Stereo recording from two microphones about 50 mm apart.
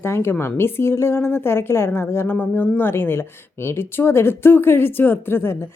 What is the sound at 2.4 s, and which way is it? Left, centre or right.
Speech, left.